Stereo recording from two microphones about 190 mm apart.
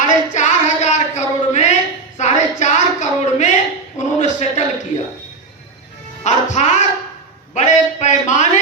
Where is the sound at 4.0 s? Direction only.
15° left (ahead or behind).